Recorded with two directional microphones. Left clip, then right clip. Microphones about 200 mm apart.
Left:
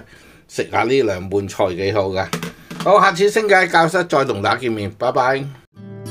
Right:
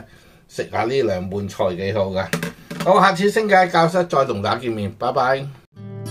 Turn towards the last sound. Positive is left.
turn(degrees=40)  # may be behind; listen again after turning